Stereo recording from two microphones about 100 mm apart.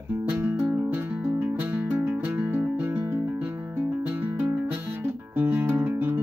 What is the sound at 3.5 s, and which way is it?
Music, 20° right (ahead or behind).